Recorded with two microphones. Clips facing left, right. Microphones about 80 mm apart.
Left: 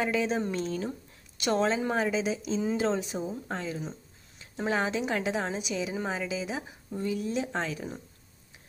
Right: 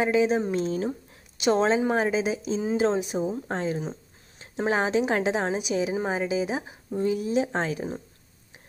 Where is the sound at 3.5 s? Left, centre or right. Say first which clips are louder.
Right 6 dB; right.